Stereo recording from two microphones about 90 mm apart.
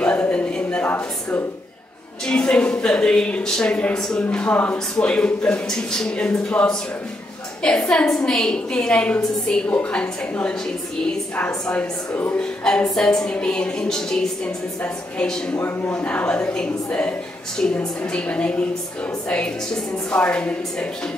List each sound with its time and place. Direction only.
0.0 s a sound: 15° left (ahead or behind)
2.2 s a woman's voice: 10° left (ahead or behind)
15.5 s a man's voice: 20° left (ahead or behind)